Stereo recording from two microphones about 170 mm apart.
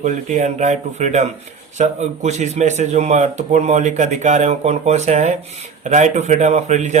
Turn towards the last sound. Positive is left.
turn(degrees=-45)  # may be behind; listen again after turning